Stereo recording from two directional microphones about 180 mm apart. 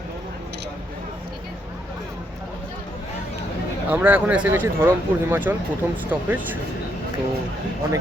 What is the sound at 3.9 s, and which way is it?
Speech, 10° right (ahead or behind).